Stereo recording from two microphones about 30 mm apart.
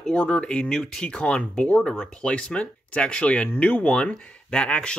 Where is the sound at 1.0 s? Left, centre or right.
Left.